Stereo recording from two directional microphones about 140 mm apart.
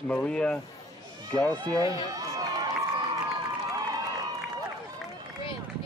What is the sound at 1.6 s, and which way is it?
Speech, 25° right (ahead or behind).